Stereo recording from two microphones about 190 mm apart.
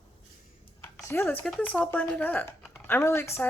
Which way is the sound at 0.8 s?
15° left (ahead or behind).